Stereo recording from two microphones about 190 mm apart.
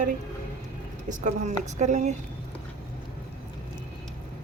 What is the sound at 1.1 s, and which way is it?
Speech, 40° right (ahead or behind).